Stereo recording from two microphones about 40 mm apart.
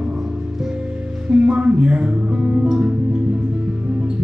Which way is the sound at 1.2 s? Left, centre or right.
Right.